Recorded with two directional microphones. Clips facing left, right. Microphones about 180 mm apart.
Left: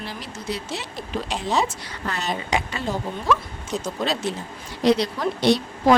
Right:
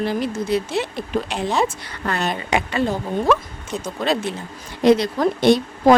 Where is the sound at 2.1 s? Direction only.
55° right (ahead or behind).